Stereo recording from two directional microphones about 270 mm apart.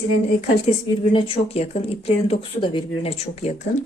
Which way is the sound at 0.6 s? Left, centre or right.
Left.